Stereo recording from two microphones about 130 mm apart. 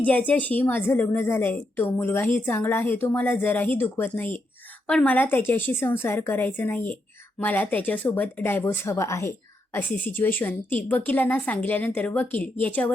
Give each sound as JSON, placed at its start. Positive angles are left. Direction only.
{"t": 0.0, "sound": "a woman's voice", "side_deg": 10}